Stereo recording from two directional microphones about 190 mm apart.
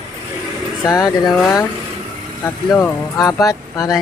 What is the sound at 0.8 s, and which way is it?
Speech, 20° left (ahead or behind).